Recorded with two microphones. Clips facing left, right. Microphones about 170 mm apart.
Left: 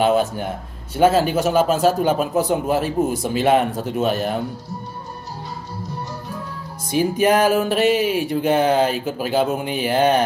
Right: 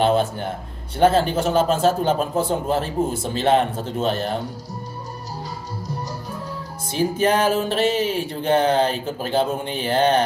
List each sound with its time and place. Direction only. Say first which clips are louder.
0.0 s speech: left 1 dB; 10° left (ahead or behind)
7.0 s speech: left 3 dB; 10° left (ahead or behind)